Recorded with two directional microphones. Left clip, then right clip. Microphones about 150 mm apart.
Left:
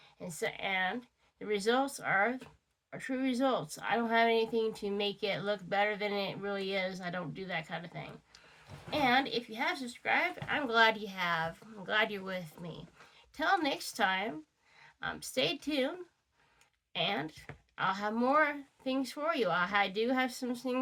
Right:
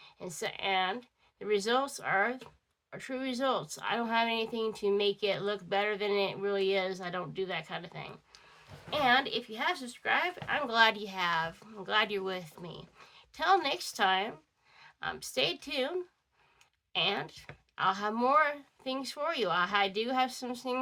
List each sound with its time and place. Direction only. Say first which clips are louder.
0.2 s speech: even; 35° right (ahead or behind)
16.9 s speech: right 3 dB; 35° right (ahead or behind)